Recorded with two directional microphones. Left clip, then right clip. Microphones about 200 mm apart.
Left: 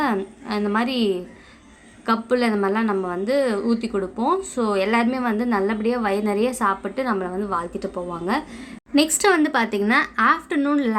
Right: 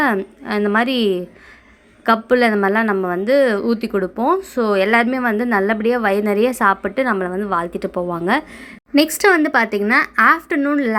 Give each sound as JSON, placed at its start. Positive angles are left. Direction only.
{"t": 0.0, "sound": "a woman's voice", "side_deg": -30}